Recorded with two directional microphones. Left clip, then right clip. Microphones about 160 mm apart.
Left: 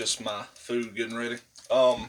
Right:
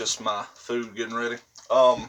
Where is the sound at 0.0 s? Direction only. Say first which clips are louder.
Right 4 dB; 25° left (ahead or behind).